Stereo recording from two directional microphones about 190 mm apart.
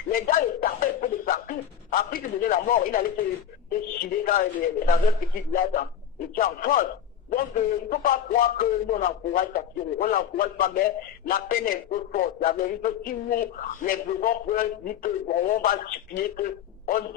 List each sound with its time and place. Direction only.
0.1 s a man's voice: 45° left (ahead or behind)
7.9 s a man's voice: 50° left (ahead or behind)